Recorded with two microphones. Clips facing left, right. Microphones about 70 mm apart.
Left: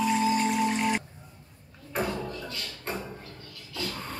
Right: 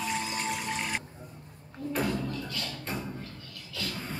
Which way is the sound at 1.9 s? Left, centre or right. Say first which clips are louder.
Even; left.